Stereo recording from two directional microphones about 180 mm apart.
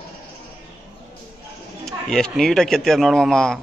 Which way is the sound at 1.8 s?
5° left (ahead or behind).